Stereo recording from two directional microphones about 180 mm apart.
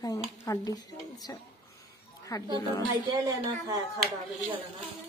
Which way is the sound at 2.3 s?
20° left (ahead or behind).